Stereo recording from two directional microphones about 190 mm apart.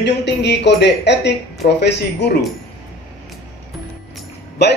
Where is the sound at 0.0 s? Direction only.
65° left (ahead or behind).